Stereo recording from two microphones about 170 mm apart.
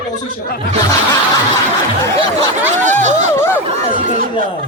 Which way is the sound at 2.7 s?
45° right (ahead or behind).